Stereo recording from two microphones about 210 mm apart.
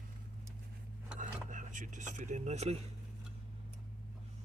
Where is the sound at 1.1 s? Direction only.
40° right (ahead or behind).